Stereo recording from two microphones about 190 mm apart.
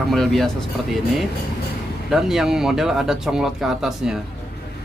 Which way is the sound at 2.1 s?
Centre (ahead or behind).